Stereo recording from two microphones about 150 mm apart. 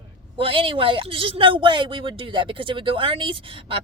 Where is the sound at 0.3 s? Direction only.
35° right (ahead or behind).